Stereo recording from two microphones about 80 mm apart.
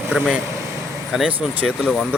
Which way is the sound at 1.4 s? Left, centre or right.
Centre.